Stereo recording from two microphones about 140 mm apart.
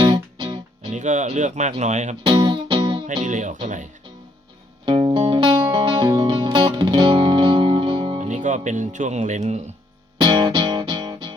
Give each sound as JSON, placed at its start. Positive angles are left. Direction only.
{"t": 0.0, "sound": "music", "side_deg": -30}
{"t": 0.9, "sound": "speech", "side_deg": -60}
{"t": 2.2, "sound": "music", "side_deg": -35}
{"t": 3.2, "sound": "speech", "side_deg": -60}
{"t": 4.9, "sound": "music", "side_deg": -35}
{"t": 8.3, "sound": "speech", "side_deg": -60}
{"t": 10.2, "sound": "music", "side_deg": -35}